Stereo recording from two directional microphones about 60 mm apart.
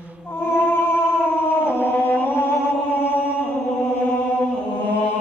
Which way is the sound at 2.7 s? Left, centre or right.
Left.